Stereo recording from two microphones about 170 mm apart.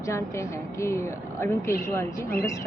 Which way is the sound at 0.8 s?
15° left (ahead or behind).